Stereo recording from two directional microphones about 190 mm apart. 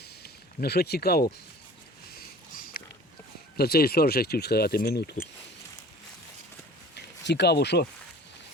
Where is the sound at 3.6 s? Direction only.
55° left (ahead or behind).